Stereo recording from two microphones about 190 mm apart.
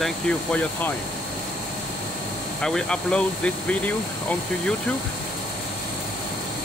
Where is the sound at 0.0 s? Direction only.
5° left (ahead or behind).